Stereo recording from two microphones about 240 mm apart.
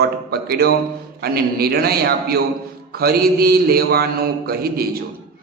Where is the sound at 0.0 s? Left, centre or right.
Right.